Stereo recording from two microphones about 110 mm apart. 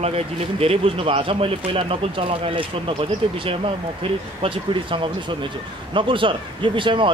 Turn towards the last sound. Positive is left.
turn(degrees=-50)  # may be behind; listen again after turning